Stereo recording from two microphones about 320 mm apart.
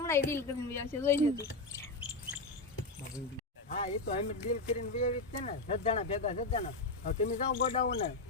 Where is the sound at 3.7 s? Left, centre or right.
Left.